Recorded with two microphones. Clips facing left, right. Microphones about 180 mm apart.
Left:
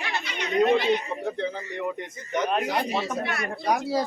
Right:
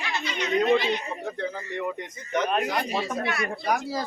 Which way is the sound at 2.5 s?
25° left (ahead or behind).